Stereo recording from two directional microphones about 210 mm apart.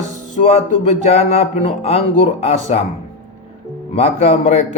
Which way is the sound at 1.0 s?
30° left (ahead or behind).